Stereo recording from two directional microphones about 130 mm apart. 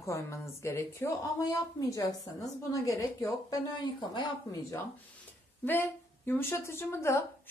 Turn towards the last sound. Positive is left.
turn(degrees=20)  # may be behind; listen again after turning